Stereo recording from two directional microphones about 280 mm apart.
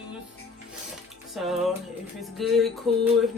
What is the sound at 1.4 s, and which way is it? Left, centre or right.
A man's voice, centre.